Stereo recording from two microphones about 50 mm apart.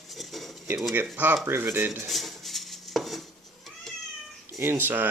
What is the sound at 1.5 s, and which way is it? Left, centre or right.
Speech, right.